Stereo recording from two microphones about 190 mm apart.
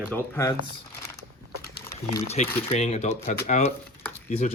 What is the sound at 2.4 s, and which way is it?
Speech, 40° left (ahead or behind).